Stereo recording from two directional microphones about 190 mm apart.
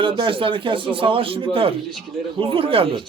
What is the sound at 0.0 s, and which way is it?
Speech, 25° right (ahead or behind).